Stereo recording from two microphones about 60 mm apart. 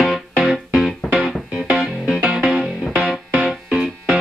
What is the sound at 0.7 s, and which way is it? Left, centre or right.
Music, centre.